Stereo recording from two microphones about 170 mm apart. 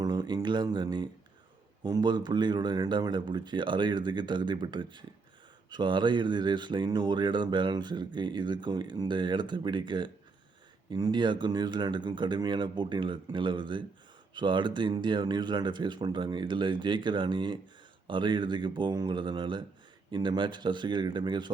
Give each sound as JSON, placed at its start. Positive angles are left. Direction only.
{"t": 0.0, "sound": "speech", "side_deg": -25}